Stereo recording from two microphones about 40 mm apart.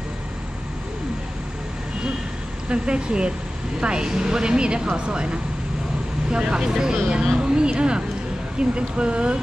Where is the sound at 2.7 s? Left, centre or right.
Right.